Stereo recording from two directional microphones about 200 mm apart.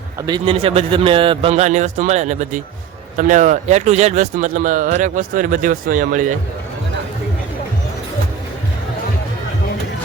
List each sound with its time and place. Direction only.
0.3 s a man's voice: 25° right (ahead or behind)